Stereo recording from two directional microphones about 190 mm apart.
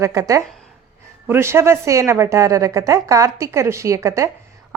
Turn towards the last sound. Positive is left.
turn(degrees=-15)  # may be behind; listen again after turning